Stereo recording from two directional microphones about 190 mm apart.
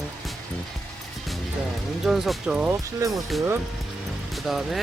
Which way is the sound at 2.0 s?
Centre (ahead or behind).